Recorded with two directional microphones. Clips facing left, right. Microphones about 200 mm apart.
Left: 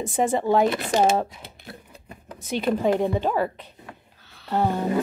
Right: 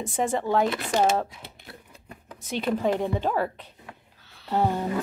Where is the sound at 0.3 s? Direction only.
10° left (ahead or behind).